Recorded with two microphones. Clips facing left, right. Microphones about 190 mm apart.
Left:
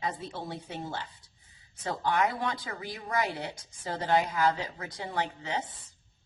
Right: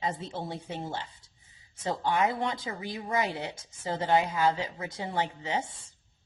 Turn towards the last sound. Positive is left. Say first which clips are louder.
# right 2 dB
turn(degrees=-25)  # may be behind; listen again after turning